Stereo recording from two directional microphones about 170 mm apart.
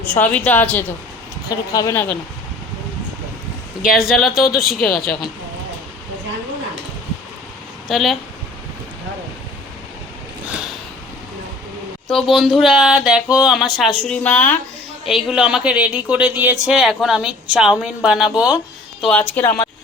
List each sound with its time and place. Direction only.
0.0 s a woman's voice: 10° left (ahead or behind)
1.5 s speech: 20° left (ahead or behind)
3.8 s speech: centre (ahead or behind)
7.9 s speech: centre (ahead or behind)
12.1 s a woman's voice: centre (ahead or behind)
15.0 s speech: centre (ahead or behind)
19.0 s a woman's voice: 10° left (ahead or behind)